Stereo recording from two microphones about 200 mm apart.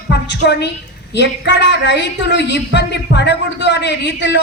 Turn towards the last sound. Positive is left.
turn(degrees=60)  # may be behind; listen again after turning